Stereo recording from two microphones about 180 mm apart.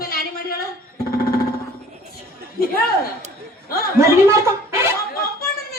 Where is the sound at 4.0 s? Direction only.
15° right (ahead or behind).